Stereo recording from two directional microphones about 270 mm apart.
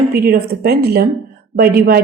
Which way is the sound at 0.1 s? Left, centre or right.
Right.